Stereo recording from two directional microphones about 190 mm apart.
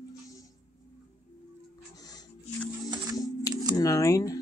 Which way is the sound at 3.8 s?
15° left (ahead or behind).